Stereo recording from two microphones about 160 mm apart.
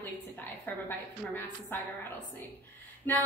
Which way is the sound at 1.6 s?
10° left (ahead or behind).